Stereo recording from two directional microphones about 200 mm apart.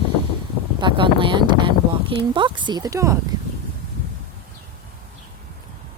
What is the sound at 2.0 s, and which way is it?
Speech, 25° right (ahead or behind).